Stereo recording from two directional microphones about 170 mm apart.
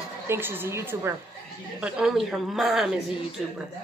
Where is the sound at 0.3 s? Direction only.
10° right (ahead or behind).